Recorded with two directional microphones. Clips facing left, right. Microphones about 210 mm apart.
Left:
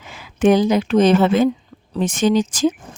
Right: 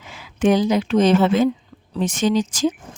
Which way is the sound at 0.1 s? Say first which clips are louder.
Left 3 dB; 50° left (ahead or behind).